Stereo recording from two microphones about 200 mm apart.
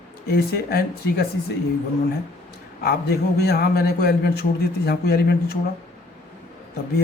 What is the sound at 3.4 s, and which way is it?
A man's voice, 50° left (ahead or behind).